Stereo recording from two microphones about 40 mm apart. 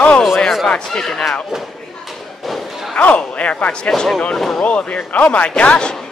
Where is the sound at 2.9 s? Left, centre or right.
Left.